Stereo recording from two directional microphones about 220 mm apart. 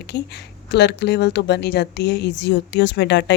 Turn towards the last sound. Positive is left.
turn(degrees=50)  # may be behind; listen again after turning